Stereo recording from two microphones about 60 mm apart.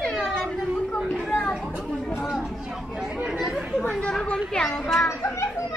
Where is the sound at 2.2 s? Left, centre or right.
Centre.